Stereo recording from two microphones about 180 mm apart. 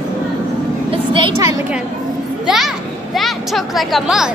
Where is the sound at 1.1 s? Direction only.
25° right (ahead or behind).